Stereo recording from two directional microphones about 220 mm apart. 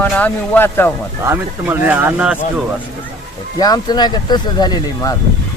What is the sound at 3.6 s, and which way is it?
Speech, 20° left (ahead or behind).